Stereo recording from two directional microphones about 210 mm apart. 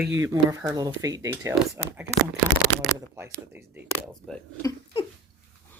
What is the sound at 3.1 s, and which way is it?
Speech, 10° right (ahead or behind).